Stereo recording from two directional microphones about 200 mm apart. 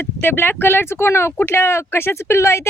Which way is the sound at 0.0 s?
10° left (ahead or behind).